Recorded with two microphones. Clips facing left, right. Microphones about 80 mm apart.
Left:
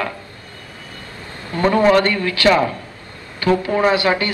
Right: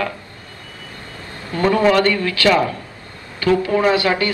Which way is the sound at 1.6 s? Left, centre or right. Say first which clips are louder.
Left 1 dB; left.